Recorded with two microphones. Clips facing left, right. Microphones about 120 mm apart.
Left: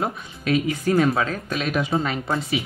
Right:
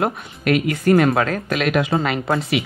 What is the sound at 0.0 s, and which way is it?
Speech, 70° right (ahead or behind).